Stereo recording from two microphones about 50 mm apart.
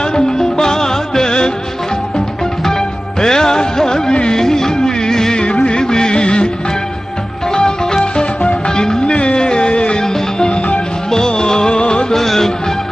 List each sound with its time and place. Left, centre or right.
0.0 s music: centre
7.5 s music: centre